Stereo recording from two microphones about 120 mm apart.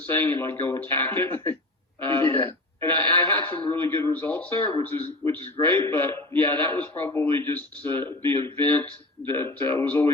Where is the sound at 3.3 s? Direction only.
15° left (ahead or behind).